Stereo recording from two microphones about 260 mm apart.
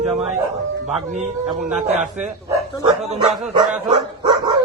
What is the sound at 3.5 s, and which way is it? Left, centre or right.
Speech, centre.